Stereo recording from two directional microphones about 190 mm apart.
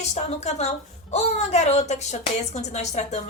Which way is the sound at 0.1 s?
35° left (ahead or behind).